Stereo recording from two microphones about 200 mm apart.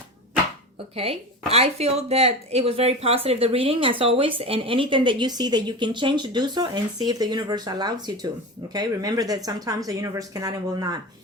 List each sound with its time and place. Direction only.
1.5 s speech: 30° right (ahead or behind)